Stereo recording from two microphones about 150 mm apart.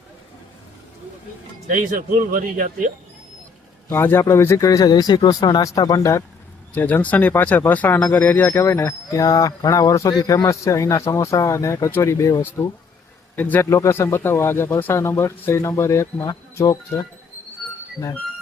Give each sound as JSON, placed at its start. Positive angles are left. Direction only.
{"t": 1.7, "sound": "speech", "side_deg": -65}
{"t": 3.8, "sound": "speech", "side_deg": 15}